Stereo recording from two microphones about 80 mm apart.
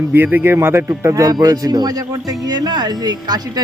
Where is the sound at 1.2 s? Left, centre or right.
Right.